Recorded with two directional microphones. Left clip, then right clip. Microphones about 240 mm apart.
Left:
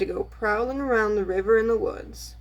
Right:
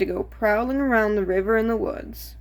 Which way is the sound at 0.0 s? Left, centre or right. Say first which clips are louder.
Right 3 dB; right.